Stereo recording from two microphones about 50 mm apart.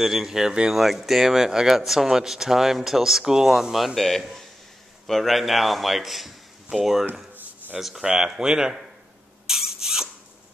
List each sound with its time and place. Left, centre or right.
0.0 s a man's voice: centre
7.3 s a sound: right
7.8 s speech: centre
9.5 s rodents: centre